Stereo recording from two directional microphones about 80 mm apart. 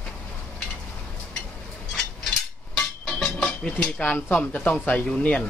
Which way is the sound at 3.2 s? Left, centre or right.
Centre.